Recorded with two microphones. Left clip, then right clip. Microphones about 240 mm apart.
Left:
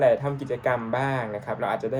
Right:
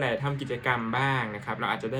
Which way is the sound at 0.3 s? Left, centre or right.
Right.